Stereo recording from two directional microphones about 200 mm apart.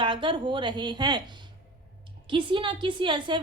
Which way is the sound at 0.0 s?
25° right (ahead or behind).